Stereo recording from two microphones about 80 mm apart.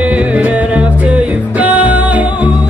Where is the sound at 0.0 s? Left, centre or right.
Centre.